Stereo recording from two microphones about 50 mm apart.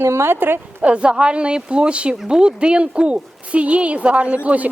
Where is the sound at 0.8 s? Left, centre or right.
Right.